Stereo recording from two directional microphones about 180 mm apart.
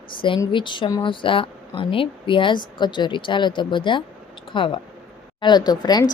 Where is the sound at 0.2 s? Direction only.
25° left (ahead or behind).